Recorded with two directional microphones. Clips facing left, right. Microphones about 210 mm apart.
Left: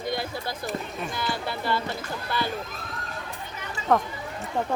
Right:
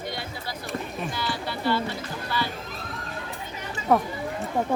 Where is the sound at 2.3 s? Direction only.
50° left (ahead or behind).